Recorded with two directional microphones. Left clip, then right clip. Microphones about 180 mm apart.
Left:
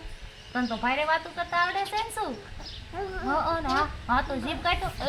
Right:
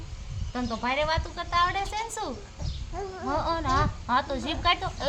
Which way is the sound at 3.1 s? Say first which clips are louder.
Left 1 dB; 30° right (ahead or behind).